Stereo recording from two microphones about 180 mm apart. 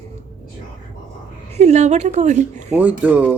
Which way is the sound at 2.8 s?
10° right (ahead or behind).